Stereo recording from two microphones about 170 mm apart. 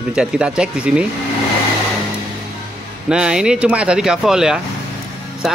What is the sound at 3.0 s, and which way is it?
Speech, 5° right (ahead or behind).